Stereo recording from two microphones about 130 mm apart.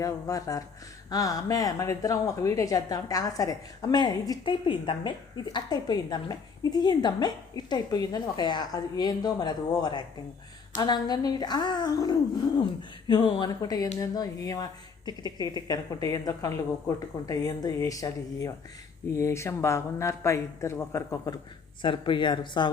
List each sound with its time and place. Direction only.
0.0 s a woman's voice: 25° left (ahead or behind)
21.8 s a woman's voice: 40° left (ahead or behind)